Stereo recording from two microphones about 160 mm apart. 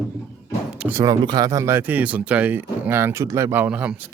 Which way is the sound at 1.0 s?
25° right (ahead or behind).